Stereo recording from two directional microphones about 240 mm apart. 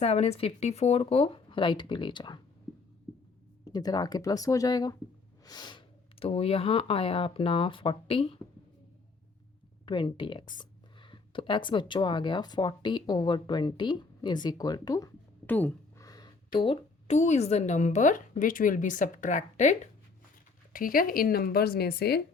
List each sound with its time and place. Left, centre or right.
0.0 s speech: left
3.7 s speech: centre
9.8 s speech: centre
10.4 s a woman's voice: left
11.0 s a woman's voice: centre; by 22.2 s left